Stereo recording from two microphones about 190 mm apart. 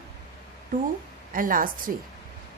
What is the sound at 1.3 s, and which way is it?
Speech, 45° right (ahead or behind).